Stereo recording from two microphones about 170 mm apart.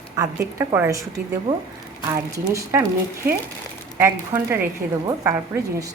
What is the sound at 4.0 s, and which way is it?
A woman's voice, 15° right (ahead or behind).